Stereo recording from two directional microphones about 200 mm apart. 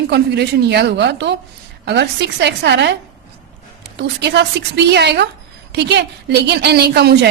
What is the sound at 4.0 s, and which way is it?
A woman's voice, 60° right (ahead or behind).